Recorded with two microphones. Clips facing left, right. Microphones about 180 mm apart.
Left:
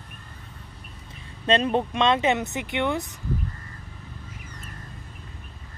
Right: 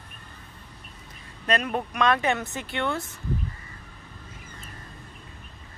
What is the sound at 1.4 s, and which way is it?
Speech, 25° left (ahead or behind).